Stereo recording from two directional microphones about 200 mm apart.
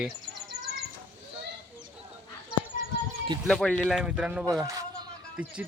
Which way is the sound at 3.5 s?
5° left (ahead or behind).